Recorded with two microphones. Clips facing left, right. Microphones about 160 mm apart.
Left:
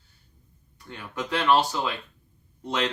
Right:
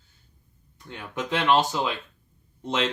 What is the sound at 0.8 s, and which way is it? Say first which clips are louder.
Speech: right 1 dB; 20° right (ahead or behind).